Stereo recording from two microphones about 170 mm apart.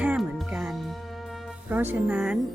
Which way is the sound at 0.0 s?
5° right (ahead or behind).